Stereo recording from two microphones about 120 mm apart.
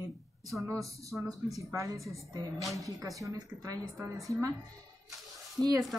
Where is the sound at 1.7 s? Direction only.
25° right (ahead or behind).